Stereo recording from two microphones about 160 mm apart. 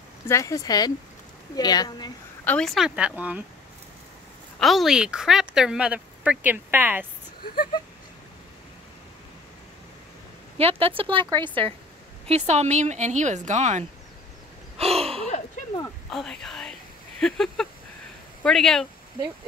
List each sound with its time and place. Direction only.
0.3 s speech: 20° left (ahead or behind)
2.4 s a woman's voice: 5° left (ahead or behind)
4.6 s a woman's voice: centre (ahead or behind)
10.6 s a woman's voice: 35° right (ahead or behind)
12.3 s speech: 45° right (ahead or behind)
14.8 s gasp: 40° right (ahead or behind)
15.2 s a sound: 50° left (ahead or behind)
16.1 s a woman's voice: centre (ahead or behind)